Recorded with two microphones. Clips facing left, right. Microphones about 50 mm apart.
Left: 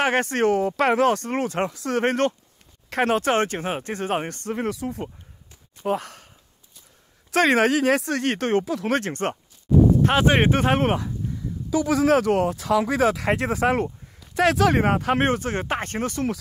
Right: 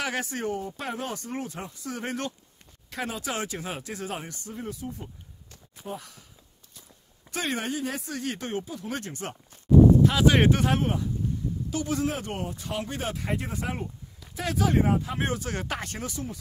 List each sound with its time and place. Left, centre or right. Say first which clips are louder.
0.0 s speech: left 10 dB; left
0.5 s speech: left 12 dB; left
4.6 s speech: left 7 dB; left
5.9 s speech: left 12 dB; left
7.2 s speech: left 12 dB; left
10.0 s speech: left 2 dB; left
10.8 s speech: left 6 dB; left
12.1 s speech: left 13 dB; left
15.2 s speech: left 7 dB; left